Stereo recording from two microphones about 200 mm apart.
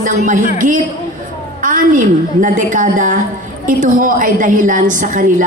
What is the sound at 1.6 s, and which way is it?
A woman's voice, 40° right (ahead or behind).